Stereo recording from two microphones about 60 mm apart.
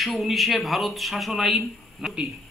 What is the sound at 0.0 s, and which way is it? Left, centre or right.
A man's voice, centre.